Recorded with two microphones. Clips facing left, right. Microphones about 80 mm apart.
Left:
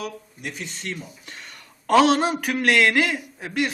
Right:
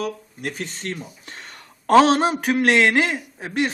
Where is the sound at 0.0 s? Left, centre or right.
Right.